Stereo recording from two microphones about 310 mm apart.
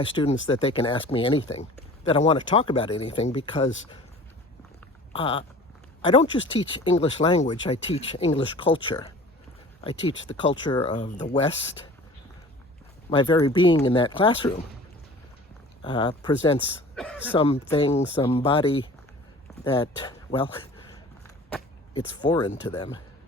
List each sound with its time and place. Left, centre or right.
0.0 s speech: centre
5.1 s speech: centre
6.6 s speech: centre
13.1 s speech: centre
15.8 s speech: centre
16.9 s speech: centre
17.3 s speech: centre